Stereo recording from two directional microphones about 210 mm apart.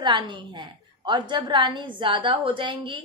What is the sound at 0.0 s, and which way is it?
A woman's voice, 20° right (ahead or behind).